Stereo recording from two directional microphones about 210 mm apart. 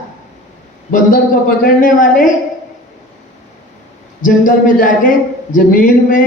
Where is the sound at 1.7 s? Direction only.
40° left (ahead or behind).